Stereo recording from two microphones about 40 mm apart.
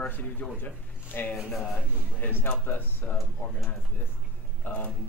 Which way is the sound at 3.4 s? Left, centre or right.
Left.